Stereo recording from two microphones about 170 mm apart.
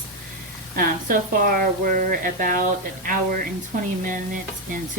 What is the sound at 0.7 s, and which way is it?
Speech, 55° right (ahead or behind).